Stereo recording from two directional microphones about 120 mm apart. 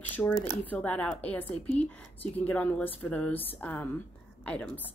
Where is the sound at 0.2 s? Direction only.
15° left (ahead or behind).